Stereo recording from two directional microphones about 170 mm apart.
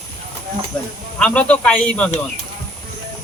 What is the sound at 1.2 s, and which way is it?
Speech, 10° left (ahead or behind).